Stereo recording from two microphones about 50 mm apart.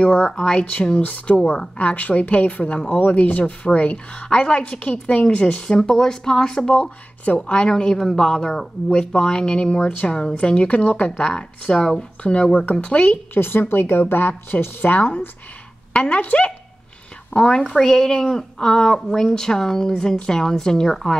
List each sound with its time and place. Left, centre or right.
0.0 s a woman's voice: left
0.7 s a woman's voice: left
5.6 s a woman's voice: centre
6.7 s a woman's voice: left
12.2 s a woman's voice: left
13.3 s a woman's voice: left
15.0 s a woman's voice: left
17.3 s a woman's voice: centre